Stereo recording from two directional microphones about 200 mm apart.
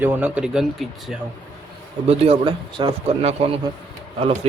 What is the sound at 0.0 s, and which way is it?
Speech, 10° right (ahead or behind).